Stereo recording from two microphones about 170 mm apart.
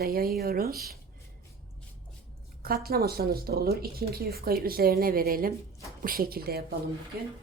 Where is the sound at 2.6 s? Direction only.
65° right (ahead or behind).